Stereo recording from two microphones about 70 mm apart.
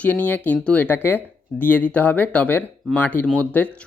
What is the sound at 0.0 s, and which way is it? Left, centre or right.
Speech, left.